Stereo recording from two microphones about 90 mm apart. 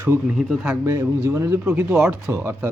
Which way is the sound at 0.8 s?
30° right (ahead or behind).